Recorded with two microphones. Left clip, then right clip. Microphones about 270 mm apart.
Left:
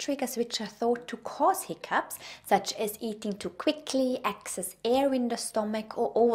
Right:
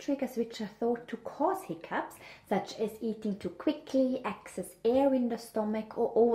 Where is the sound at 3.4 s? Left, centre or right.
Left.